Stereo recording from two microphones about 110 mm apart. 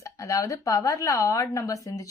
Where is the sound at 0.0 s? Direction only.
30° left (ahead or behind).